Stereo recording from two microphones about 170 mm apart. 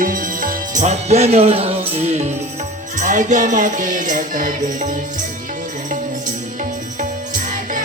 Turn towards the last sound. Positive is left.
turn(degrees=-50)  # may be behind; listen again after turning